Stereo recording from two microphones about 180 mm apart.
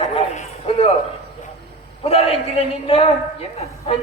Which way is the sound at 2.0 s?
35° left (ahead or behind).